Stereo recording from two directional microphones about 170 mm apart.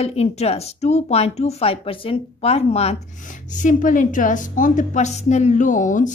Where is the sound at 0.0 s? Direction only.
40° left (ahead or behind).